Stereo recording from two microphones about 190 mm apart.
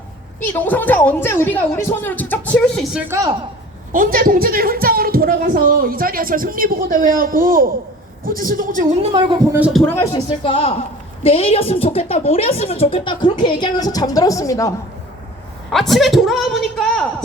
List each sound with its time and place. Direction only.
0.6 s speech: 10° left (ahead or behind)
2.9 s a woman's voice: 15° right (ahead or behind)
3.9 s a woman's voice: 45° right (ahead or behind)
9.6 s speech: 5° right (ahead or behind)
9.8 s a woman's voice: 15° left (ahead or behind)
15.7 s a woman's voice: centre (ahead or behind)